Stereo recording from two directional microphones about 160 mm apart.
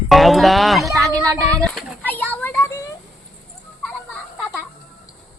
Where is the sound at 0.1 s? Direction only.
Centre (ahead or behind).